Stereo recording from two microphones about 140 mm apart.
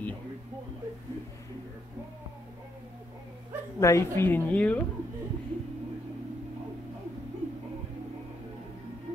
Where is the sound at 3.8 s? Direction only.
20° left (ahead or behind).